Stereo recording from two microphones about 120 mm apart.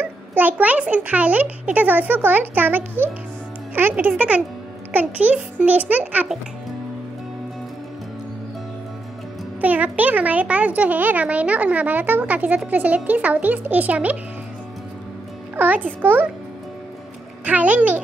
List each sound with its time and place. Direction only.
0.0 s a child's voice: 15° right (ahead or behind)
9.6 s a child's voice: 15° right (ahead or behind)
15.5 s a child's voice: 15° right (ahead or behind)
17.5 s a child's voice: 10° right (ahead or behind)